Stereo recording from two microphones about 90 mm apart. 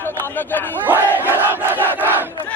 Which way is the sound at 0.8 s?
20° right (ahead or behind).